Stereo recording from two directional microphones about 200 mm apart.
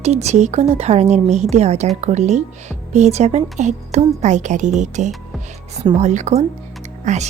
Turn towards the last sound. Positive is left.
turn(degrees=-35)  # may be behind; listen again after turning